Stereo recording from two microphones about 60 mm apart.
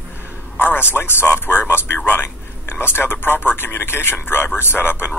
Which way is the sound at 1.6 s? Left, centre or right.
Left.